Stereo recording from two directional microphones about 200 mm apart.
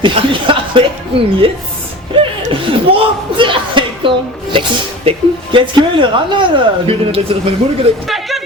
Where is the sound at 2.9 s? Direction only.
25° right (ahead or behind).